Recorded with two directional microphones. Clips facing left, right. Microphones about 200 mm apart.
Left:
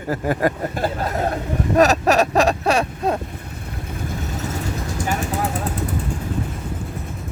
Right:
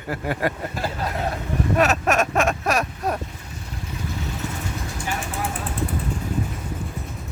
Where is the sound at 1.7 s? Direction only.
35° left (ahead or behind).